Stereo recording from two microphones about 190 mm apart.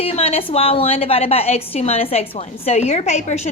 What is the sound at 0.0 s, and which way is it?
A woman's voice, 30° left (ahead or behind).